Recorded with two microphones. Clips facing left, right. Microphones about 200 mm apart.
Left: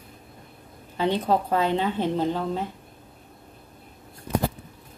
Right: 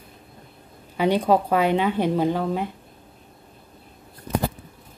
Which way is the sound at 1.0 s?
15° right (ahead or behind).